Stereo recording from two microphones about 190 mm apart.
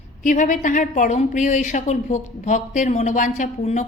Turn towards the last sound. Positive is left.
turn(degrees=40)  # may be behind; listen again after turning